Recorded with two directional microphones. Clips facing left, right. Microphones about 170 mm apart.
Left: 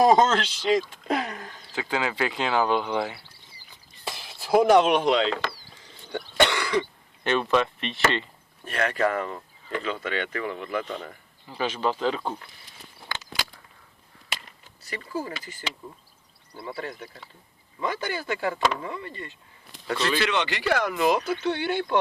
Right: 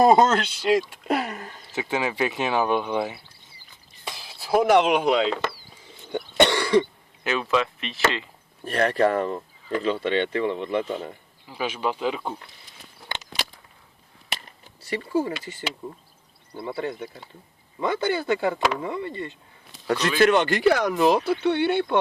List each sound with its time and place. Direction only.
0.0 s speech: 10° right (ahead or behind)
1.7 s speech: 20° right (ahead or behind)
4.5 s speech: 10° left (ahead or behind)
4.9 s speech: 5° right (ahead or behind)
6.1 s cough: 20° right (ahead or behind)
7.3 s speech: 5° right (ahead or behind)
8.6 s speech: 35° right (ahead or behind)
11.4 s speech: 10° right (ahead or behind)
14.8 s speech: 25° right (ahead or behind)
19.9 s speech: 45° right (ahead or behind); by 21.9 s 25° right (ahead or behind)